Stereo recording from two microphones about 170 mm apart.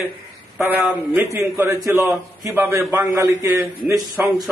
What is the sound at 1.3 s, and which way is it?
A man's voice, 15° right (ahead or behind).